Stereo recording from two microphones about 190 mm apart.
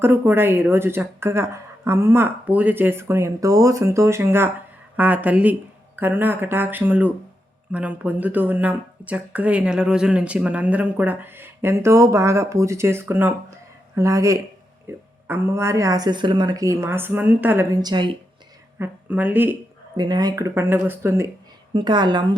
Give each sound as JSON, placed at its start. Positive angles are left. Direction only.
{"t": 0.0, "sound": "speech", "side_deg": -10}
{"t": 18.8, "sound": "speech", "side_deg": -10}
{"t": 20.0, "sound": "speech", "side_deg": -20}
{"t": 21.7, "sound": "a woman's voice", "side_deg": -25}